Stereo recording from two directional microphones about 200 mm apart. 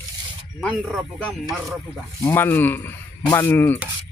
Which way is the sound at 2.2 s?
10° left (ahead or behind).